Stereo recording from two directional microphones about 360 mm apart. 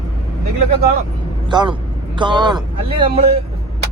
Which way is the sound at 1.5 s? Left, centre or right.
Centre.